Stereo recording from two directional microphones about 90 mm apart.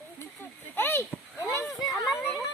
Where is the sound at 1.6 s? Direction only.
Centre (ahead or behind).